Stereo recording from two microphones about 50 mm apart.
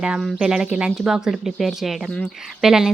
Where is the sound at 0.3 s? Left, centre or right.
Centre.